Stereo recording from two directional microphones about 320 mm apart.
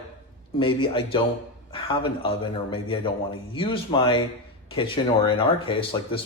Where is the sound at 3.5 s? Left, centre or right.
Centre.